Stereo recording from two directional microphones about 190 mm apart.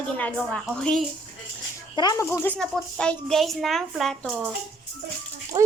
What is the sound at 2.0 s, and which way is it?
A child's voice, 15° left (ahead or behind).